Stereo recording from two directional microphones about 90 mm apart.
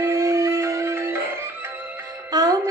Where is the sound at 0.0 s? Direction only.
35° right (ahead or behind).